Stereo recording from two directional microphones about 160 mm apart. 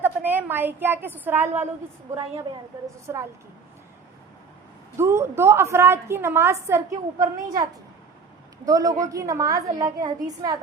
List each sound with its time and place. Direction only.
0.0 s a woman's voice: 10° right (ahead or behind)
3.1 s a woman's voice: 15° right (ahead or behind)
4.9 s a woman's voice: 15° right (ahead or behind)